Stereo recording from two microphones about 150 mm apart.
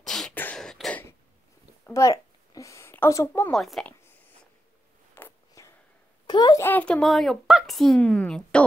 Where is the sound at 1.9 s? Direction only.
20° left (ahead or behind).